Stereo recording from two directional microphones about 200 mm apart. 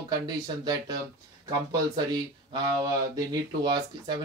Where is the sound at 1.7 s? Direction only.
20° right (ahead or behind).